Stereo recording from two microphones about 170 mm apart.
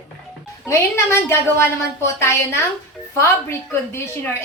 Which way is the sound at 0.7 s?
15° left (ahead or behind).